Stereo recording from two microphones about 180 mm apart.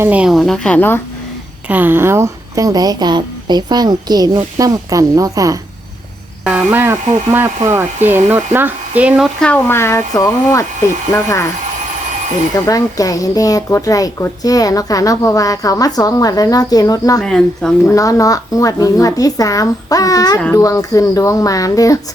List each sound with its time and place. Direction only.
0.0 s speech: 5° right (ahead or behind); by 1.0 s 10° left (ahead or behind)
1.6 s a woman's voice: 10° right (ahead or behind)
6.4 s cricket: 5° right (ahead or behind)
6.7 s speech: 10° right (ahead or behind); by 11.4 s 15° left (ahead or behind)
12.5 s speech: 20° left (ahead or behind)
17.2 s speech: centre (ahead or behind)
17.9 s speech: 20° left (ahead or behind)